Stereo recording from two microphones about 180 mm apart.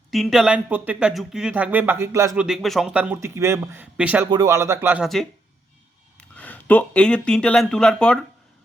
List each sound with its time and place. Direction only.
0.1 s speech: centre (ahead or behind)
4.3 s speech: 20° right (ahead or behind)
5.0 s speech: centre (ahead or behind)